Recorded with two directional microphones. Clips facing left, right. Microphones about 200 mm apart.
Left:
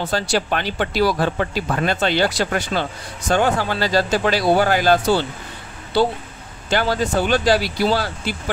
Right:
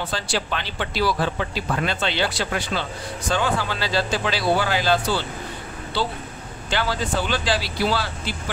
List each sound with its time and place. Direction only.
0.1 s speech: 45° left (ahead or behind)
6.7 s speech: 45° left (ahead or behind)